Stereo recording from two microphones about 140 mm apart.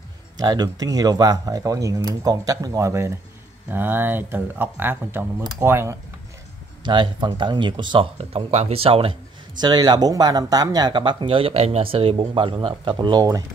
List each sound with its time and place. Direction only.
0.4 s speech: 30° right (ahead or behind)
6.8 s speech: 35° right (ahead or behind)
8.2 s speech: 45° right (ahead or behind)
9.6 s speech: 30° right (ahead or behind)